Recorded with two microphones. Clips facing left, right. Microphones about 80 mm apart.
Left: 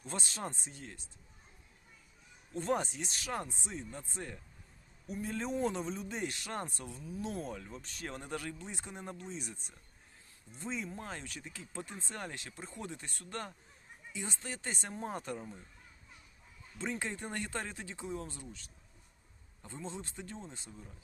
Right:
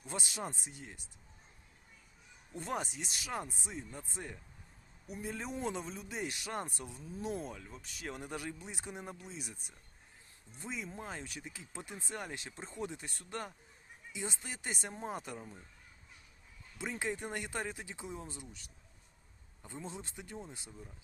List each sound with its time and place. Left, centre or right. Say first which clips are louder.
0.0 s speech: even; centre
2.6 s speech: left 5 dB; centre
7.4 s speech: left 3 dB; centre
16.7 s speech: even; centre